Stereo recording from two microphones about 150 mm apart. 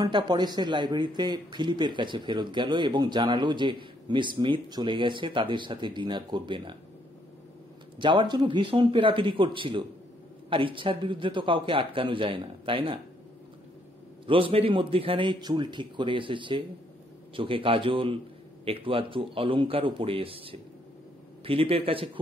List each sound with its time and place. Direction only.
0.0 s speech: 30° right (ahead or behind)
8.0 s speech: 30° right (ahead or behind)
14.2 s speech: 35° right (ahead or behind)